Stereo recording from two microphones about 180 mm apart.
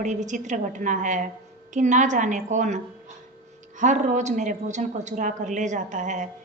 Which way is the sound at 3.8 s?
45° right (ahead or behind).